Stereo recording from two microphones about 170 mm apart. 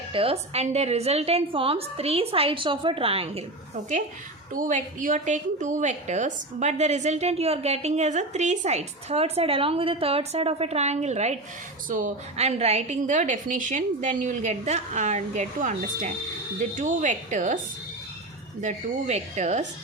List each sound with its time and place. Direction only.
0.1 s a woman's voice: 35° right (ahead or behind)
4.5 s a woman's voice: 50° right (ahead or behind)
18.6 s a woman's voice: 45° right (ahead or behind)